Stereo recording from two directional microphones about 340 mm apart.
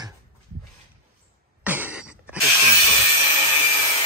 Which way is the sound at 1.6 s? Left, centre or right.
Centre.